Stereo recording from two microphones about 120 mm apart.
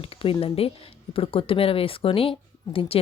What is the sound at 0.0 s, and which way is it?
Speech, 50° left (ahead or behind).